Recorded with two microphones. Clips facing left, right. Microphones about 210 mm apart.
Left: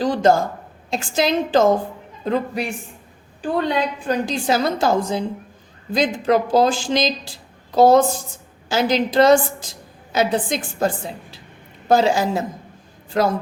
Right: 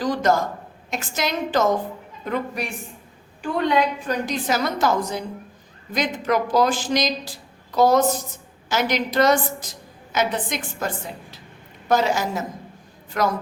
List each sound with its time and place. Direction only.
0.0 s speech: 30° left (ahead or behind)